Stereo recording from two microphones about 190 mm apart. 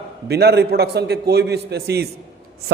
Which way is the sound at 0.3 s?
60° right (ahead or behind).